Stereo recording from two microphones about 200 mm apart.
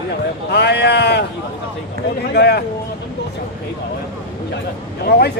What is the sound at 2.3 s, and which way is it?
Speech, 55° left (ahead or behind).